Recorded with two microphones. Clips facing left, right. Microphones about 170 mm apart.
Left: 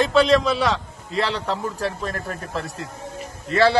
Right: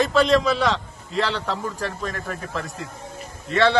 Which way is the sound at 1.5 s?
40° left (ahead or behind).